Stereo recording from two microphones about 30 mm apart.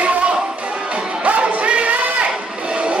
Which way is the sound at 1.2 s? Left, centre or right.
Right.